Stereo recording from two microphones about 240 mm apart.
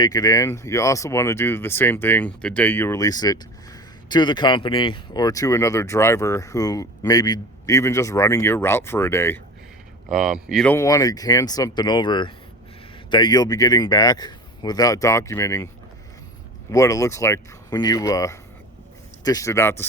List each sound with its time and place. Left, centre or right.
0.0 s speech: centre
10.1 s speech: centre
16.7 s speech: centre